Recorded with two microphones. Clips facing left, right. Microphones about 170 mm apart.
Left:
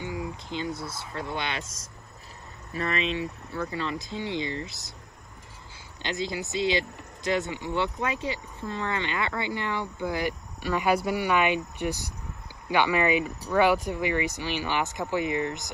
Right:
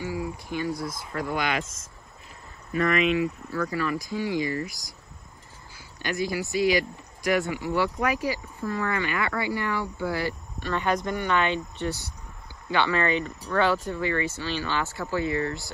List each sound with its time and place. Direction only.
0.0 s speech: 20° left (ahead or behind)
2.7 s speech: 30° left (ahead or behind)
6.0 s speech: 20° left (ahead or behind)